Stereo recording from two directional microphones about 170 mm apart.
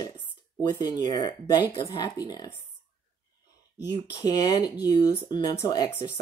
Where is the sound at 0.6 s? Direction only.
25° left (ahead or behind).